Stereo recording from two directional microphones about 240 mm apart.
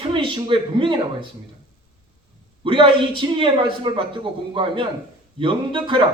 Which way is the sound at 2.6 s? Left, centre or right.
Right.